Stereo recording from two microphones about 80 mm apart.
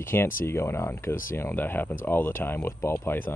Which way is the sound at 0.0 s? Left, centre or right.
Left.